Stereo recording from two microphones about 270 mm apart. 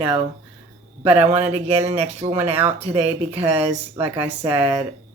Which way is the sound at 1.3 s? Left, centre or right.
Right.